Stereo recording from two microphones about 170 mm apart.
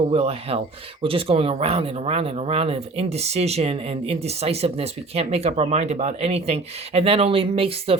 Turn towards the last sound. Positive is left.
turn(degrees=-35)  # may be behind; listen again after turning